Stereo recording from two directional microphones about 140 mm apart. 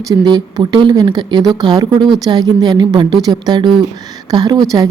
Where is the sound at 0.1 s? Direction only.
30° right (ahead or behind).